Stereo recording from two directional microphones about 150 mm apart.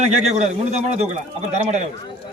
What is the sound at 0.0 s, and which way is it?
A man's voice, 50° right (ahead or behind).